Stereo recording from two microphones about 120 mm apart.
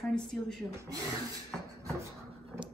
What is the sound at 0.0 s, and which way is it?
Speech, 5° left (ahead or behind).